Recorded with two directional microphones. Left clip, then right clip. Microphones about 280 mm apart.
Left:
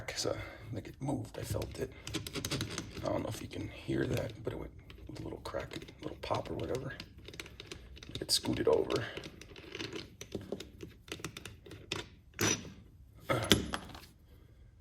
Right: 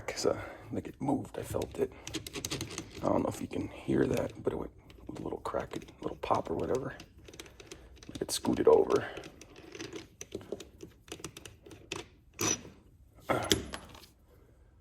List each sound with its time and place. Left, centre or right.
0.0 s speech: centre
2.1 s typing: centre
3.0 s speech: centre
7.3 s typing: centre
8.2 s speech: centre
9.1 s computer keyboard: centre
10.8 s computer keyboard: left
11.9 s a sound: centre
13.2 s a sound: centre